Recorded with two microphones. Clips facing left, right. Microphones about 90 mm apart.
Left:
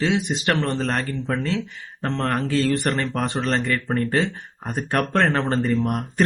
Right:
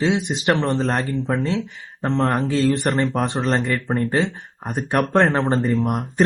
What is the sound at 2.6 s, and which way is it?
Speech, 20° right (ahead or behind).